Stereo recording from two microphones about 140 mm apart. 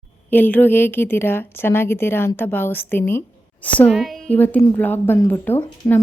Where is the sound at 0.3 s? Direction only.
15° left (ahead or behind).